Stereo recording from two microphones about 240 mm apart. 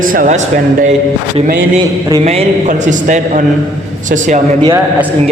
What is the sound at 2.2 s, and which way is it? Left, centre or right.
A man's voice, right.